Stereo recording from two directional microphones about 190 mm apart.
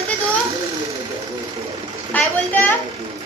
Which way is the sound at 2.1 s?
10° left (ahead or behind).